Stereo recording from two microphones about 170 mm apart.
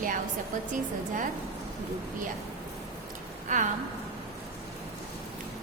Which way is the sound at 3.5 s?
45° right (ahead or behind).